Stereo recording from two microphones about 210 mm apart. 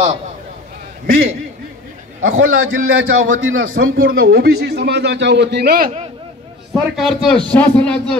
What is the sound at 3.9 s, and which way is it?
Speech, 45° right (ahead or behind).